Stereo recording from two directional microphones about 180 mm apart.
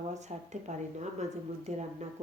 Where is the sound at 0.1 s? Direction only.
40° right (ahead or behind).